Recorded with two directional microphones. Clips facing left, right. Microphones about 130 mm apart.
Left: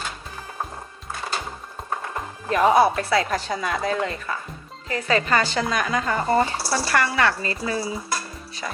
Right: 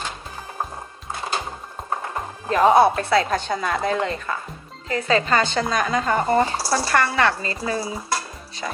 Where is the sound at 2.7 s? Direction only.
25° right (ahead or behind).